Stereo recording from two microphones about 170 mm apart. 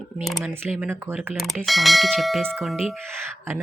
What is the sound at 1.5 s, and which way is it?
Speech, centre (ahead or behind).